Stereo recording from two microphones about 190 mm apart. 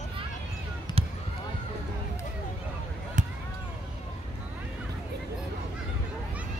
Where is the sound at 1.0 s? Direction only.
30° right (ahead or behind).